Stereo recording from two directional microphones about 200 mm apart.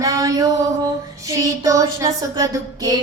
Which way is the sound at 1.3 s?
15° right (ahead or behind).